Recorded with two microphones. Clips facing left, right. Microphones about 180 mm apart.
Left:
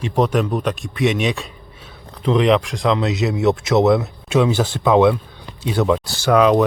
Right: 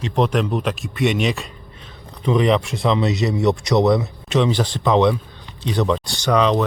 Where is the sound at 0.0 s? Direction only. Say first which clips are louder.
Left 1 dB; 5° left (ahead or behind).